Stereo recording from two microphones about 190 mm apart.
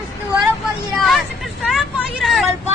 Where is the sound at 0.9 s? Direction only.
Centre (ahead or behind).